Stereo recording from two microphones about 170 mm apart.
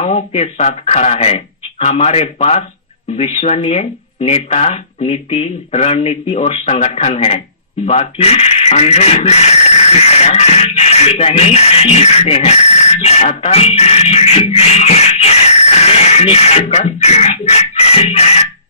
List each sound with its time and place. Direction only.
0.0 s speech: 40° left (ahead or behind)